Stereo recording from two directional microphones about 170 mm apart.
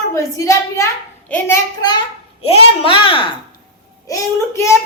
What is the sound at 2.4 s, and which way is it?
Speech, 35° left (ahead or behind).